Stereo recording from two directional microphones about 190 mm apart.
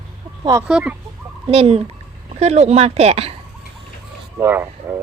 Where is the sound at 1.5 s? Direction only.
30° right (ahead or behind).